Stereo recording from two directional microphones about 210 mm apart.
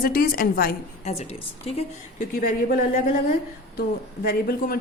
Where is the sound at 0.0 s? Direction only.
45° left (ahead or behind).